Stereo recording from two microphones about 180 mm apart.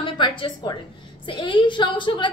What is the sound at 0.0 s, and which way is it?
A woman's voice, 25° left (ahead or behind).